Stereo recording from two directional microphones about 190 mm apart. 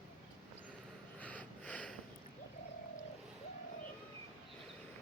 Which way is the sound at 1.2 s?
5° left (ahead or behind).